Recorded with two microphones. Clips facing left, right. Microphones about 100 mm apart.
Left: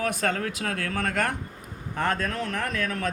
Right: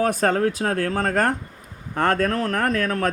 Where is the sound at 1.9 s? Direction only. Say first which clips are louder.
Right 7 dB; 50° right (ahead or behind).